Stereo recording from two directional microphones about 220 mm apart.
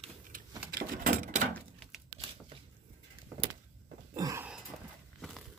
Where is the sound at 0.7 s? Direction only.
40° right (ahead or behind).